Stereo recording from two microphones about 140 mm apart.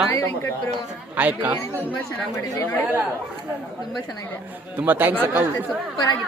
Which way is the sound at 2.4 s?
20° left (ahead or behind).